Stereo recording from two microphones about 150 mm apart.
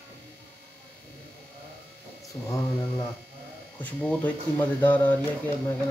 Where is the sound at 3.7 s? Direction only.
10° left (ahead or behind).